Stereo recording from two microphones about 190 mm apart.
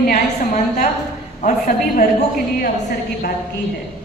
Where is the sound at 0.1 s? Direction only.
45° left (ahead or behind).